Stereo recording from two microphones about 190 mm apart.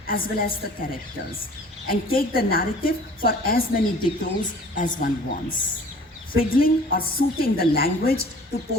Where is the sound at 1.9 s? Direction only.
50° left (ahead or behind).